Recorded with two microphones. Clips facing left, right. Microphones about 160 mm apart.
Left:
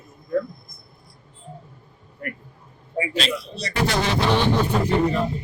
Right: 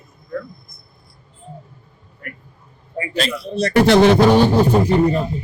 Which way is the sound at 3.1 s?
50° right (ahead or behind).